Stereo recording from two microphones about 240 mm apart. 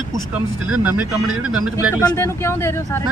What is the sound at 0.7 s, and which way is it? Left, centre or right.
Speech, centre.